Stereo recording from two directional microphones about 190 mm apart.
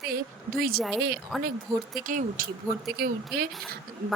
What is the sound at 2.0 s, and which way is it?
Speech, 45° right (ahead or behind).